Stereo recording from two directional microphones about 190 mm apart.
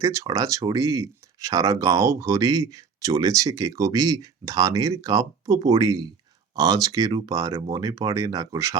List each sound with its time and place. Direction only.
0.0 s speech: 15° right (ahead or behind)